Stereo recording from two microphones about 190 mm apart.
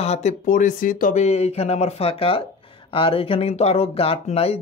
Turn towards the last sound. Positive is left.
turn(degrees=30)  # may be behind; listen again after turning